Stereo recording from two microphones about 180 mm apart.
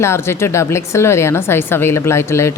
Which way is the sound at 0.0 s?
15° left (ahead or behind).